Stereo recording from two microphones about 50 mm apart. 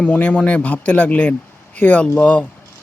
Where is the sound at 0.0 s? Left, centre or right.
Left.